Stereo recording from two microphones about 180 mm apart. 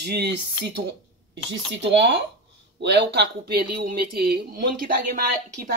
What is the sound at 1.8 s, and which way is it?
Speech, 70° right (ahead or behind).